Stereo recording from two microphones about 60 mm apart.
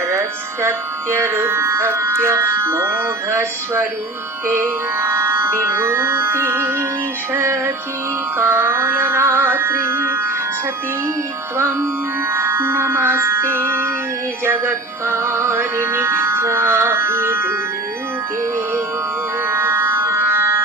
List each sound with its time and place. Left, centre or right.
0.1 s speech: right
4.4 s speech: right
8.4 s music: right
12.3 s music: right
19.5 s music: right
20.1 s a sound: right